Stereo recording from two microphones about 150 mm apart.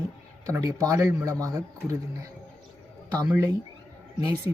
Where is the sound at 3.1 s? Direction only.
25° right (ahead or behind).